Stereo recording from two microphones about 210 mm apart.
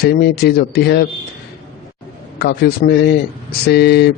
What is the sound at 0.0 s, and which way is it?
A man's voice, 50° left (ahead or behind).